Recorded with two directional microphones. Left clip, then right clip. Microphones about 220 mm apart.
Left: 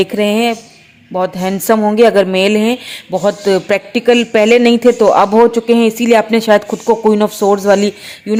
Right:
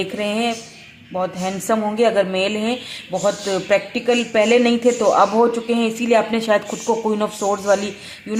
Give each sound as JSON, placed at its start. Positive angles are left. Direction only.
{"t": 0.0, "sound": "a woman's voice", "side_deg": 40}